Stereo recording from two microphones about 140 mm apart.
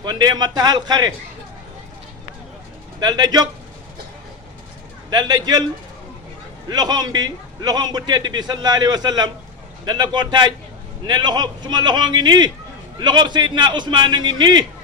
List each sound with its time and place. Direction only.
0.0 s a man's voice: 30° right (ahead or behind)
3.0 s a man's voice: 30° right (ahead or behind)
5.1 s a man's voice: 30° right (ahead or behind)
6.7 s a man's voice: 30° right (ahead or behind)